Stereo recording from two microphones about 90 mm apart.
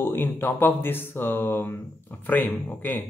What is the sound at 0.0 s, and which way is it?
Speech, 25° left (ahead or behind).